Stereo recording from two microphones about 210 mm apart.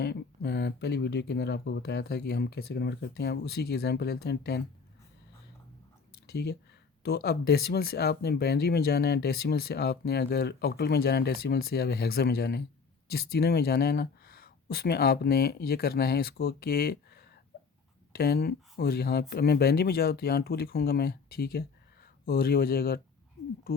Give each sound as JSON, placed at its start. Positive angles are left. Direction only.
{"t": 0.0, "sound": "speech", "side_deg": 50}
{"t": 6.2, "sound": "speech", "side_deg": 50}